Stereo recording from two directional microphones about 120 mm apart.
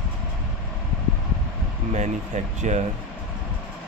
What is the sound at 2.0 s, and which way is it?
Speech, 80° right.